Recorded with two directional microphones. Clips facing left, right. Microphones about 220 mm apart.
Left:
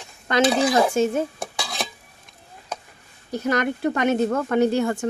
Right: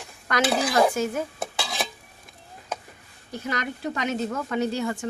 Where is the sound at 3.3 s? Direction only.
50° left (ahead or behind).